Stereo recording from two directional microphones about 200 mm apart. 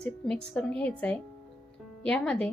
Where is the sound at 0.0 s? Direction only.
5° left (ahead or behind).